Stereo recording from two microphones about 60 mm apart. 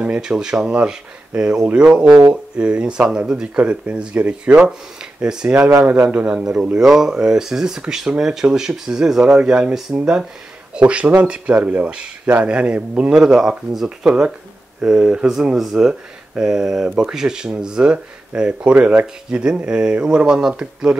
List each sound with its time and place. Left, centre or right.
0.2 s speech: centre
13.1 s speech: centre